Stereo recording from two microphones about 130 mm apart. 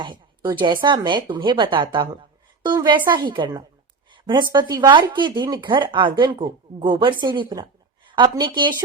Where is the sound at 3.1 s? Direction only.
40° right (ahead or behind).